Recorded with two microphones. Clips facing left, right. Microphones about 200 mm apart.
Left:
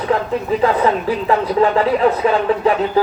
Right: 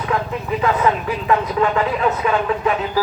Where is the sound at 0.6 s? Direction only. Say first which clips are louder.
Left 1 dB; 30° left (ahead or behind).